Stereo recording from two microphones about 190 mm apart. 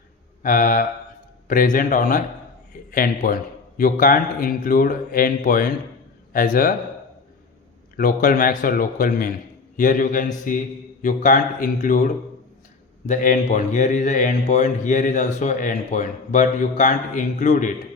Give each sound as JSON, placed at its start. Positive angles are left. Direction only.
{"t": 0.4, "sound": "a man's voice", "side_deg": 45}
{"t": 7.9, "sound": "a man's voice", "side_deg": 50}
{"t": 13.1, "sound": "speech", "side_deg": 45}